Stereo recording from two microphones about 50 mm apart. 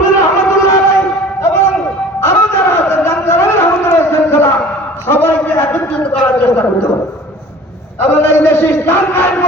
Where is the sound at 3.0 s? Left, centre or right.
Left.